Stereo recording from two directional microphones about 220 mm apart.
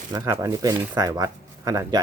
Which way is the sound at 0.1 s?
15° right (ahead or behind).